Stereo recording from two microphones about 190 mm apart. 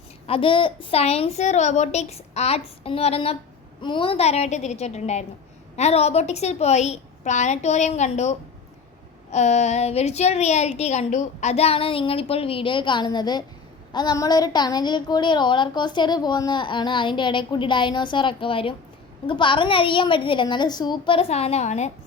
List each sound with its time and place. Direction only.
0.3 s a woman's voice: 25° left (ahead or behind)